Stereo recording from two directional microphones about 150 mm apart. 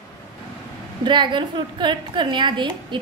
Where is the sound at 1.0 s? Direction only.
30° right (ahead or behind).